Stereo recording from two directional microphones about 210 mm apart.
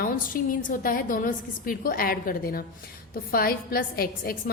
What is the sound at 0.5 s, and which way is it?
A woman's voice, 40° left (ahead or behind).